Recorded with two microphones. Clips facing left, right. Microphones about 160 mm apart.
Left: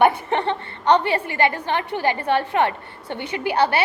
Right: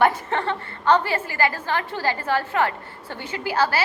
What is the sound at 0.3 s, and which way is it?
A woman's voice, 20° left (ahead or behind).